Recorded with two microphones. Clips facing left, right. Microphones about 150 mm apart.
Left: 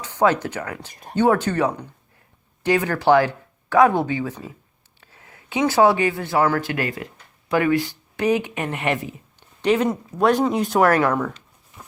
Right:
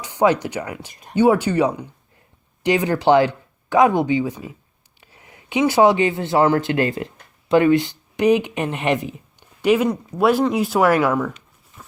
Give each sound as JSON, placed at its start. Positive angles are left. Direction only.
{"t": 0.0, "sound": "speech", "side_deg": -15}
{"t": 9.6, "sound": "speech", "side_deg": -10}